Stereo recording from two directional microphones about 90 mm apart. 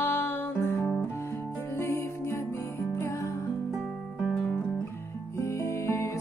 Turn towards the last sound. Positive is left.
turn(degrees=35)  # may be behind; listen again after turning